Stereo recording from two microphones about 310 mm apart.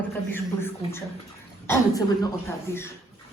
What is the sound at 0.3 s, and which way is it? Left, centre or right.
A woman's voice, centre.